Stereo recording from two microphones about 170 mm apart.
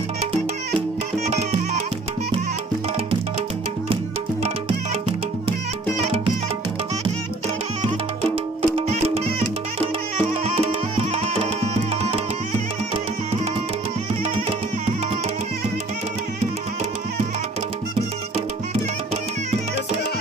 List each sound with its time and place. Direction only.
0.7 s music: 35° right (ahead or behind)
3.9 s music: 35° right (ahead or behind)
8.7 s music: 40° right (ahead or behind)